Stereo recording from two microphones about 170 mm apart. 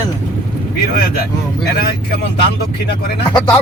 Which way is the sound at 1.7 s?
65° left (ahead or behind).